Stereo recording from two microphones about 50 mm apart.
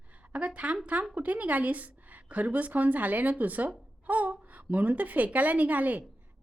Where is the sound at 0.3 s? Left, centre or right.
Right.